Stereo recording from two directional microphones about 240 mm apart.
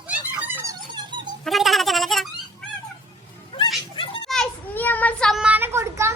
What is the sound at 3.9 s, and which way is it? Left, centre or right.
Children playing, left.